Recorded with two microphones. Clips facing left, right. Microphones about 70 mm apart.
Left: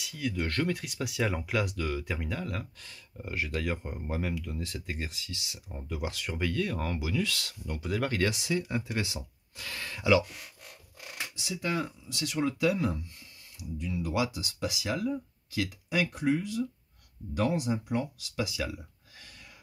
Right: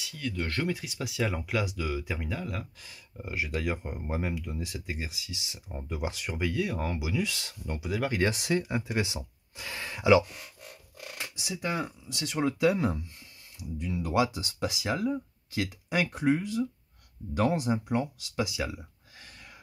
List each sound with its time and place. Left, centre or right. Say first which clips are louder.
0.0 s speech: left 1 dB; centre
5.4 s speech: right 2 dB; right
7.8 s speech: even; centre
8.3 s speech: right 2 dB; right
8.6 s speech: right 2 dB; right
11.4 s speech: even; centre; by 18.4 s right